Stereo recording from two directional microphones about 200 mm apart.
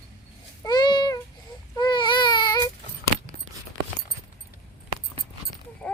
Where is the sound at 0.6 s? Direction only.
20° left (ahead or behind).